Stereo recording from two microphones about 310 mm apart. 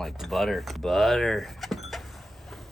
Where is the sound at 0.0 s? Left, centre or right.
Centre.